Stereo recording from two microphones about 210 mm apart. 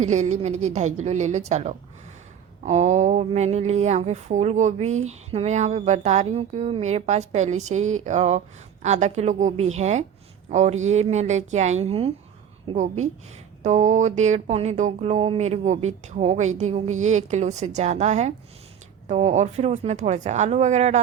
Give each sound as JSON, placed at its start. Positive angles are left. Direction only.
{"t": 0.0, "sound": "speech", "side_deg": -35}